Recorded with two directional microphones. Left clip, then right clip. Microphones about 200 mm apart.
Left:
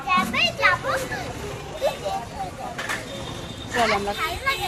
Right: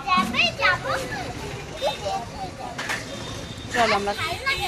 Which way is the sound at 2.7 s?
50° left (ahead or behind).